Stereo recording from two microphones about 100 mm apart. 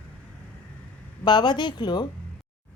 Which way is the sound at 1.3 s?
50° left (ahead or behind).